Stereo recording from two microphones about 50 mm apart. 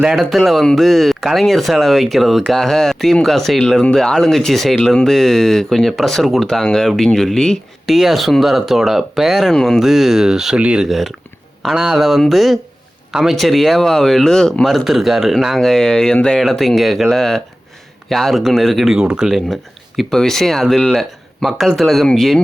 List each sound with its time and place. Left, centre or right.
0.0 s speech: centre
7.9 s speech: centre
9.5 s speech: centre
9.8 s speech: centre
14.6 s speech: centre
18.9 s speech: centre
20.0 s speech: centre